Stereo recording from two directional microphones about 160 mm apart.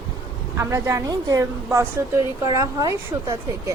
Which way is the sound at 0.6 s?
15° right (ahead or behind).